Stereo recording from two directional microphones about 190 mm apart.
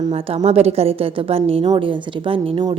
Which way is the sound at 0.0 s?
30° right (ahead or behind).